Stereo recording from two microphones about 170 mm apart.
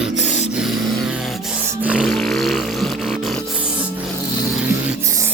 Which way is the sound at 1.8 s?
5° right (ahead or behind).